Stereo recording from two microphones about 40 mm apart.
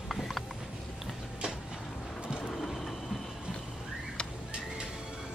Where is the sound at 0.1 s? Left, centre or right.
Centre.